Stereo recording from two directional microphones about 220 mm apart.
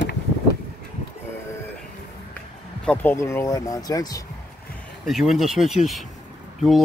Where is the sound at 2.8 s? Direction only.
5° left (ahead or behind).